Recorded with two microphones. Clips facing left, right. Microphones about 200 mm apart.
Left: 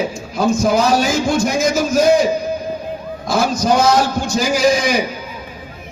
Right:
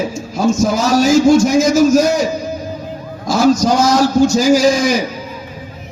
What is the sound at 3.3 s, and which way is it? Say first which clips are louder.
A man's voice: right 4 dB; 55° left (ahead or behind).